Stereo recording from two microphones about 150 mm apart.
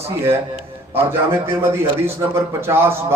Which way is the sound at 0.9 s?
15° right (ahead or behind).